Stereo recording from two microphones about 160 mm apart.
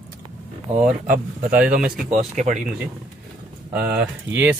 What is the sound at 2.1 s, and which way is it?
Speech, 50° right (ahead or behind).